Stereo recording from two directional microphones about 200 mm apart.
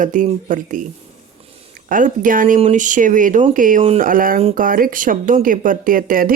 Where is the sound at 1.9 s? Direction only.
40° right (ahead or behind).